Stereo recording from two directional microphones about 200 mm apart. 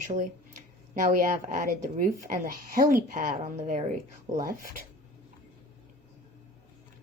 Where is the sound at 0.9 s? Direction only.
40° right (ahead or behind).